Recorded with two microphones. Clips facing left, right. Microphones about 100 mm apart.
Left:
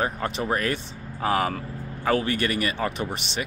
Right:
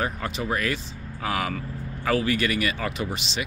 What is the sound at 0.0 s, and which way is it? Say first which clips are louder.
Speech: left 2 dB; 35° left (ahead or behind).